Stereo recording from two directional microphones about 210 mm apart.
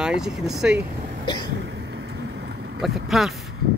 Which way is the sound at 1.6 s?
55° right (ahead or behind).